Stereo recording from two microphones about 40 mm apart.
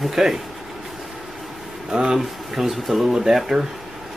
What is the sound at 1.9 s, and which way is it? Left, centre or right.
Speech, centre.